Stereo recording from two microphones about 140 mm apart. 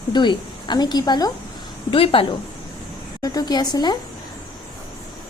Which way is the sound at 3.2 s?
25° left (ahead or behind).